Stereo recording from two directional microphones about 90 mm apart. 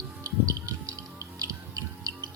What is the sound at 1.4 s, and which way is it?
Music, 40° right (ahead or behind).